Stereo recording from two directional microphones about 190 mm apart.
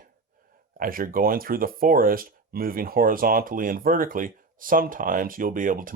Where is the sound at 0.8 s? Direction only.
45° right (ahead or behind).